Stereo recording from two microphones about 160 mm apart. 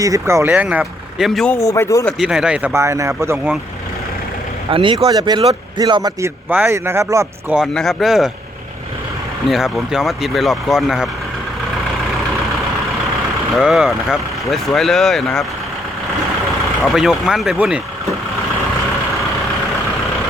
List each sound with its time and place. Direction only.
0.0 s speech: 20° right (ahead or behind); by 1.5 s centre (ahead or behind)
1.5 s speech: 20° left (ahead or behind)
2.0 s speech: 5° right (ahead or behind)
2.7 s speech: 20° right (ahead or behind)
4.7 s a man's voice: 35° right (ahead or behind)
7.5 s speech: centre (ahead or behind)
9.5 s speech: centre (ahead or behind)
13.6 s speech: centre (ahead or behind)
16.8 s speech: centre (ahead or behind)